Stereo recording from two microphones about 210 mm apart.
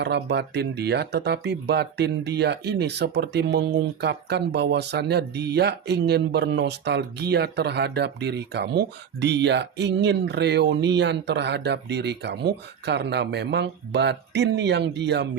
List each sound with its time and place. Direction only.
0.0 s speech: 55° right (ahead or behind)